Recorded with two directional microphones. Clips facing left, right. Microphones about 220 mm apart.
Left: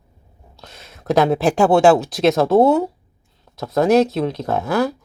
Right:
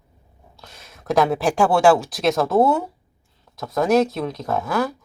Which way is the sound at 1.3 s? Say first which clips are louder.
Left 4 dB; 25° left (ahead or behind).